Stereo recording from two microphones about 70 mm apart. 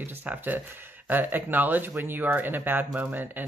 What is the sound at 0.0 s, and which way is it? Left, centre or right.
Speech, right.